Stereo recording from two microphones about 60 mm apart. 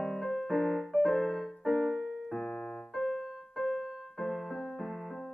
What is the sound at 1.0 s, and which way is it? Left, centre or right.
Music, centre.